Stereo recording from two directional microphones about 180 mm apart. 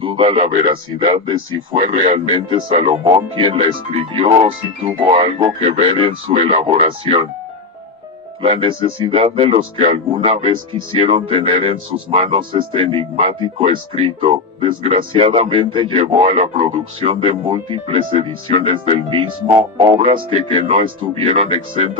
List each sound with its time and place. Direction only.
0.0 s speech: 30° right (ahead or behind)
1.8 s speech: 40° right (ahead or behind)
8.4 s speech: 30° right (ahead or behind)
20.5 s speech: 30° right (ahead or behind)